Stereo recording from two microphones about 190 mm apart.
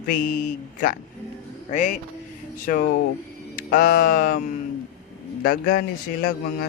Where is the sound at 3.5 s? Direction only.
45° left (ahead or behind).